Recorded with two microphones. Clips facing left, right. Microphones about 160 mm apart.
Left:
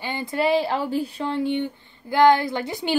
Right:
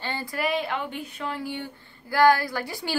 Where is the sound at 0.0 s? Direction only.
20° left (ahead or behind).